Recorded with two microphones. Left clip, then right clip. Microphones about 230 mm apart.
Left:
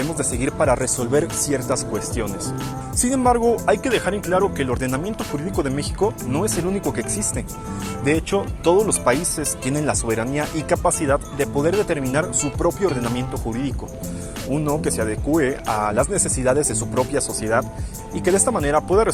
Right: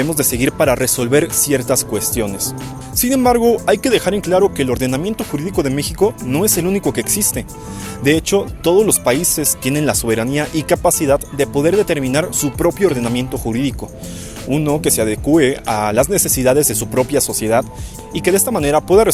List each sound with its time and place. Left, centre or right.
0.2 s speech: right
3.0 s speech: right